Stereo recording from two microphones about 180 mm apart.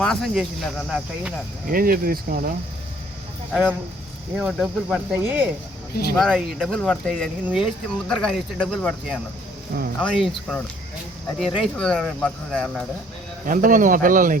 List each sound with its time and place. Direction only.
0.0 s speech: centre (ahead or behind)
1.7 s speech: 55° right (ahead or behind)
3.5 s speech: centre (ahead or behind)
5.9 s speech: 60° left (ahead or behind)
6.1 s speech: centre (ahead or behind)
11.3 s speech: centre (ahead or behind)
13.4 s speech: 50° right (ahead or behind)